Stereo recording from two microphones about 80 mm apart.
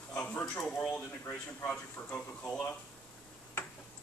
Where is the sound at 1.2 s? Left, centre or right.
Centre.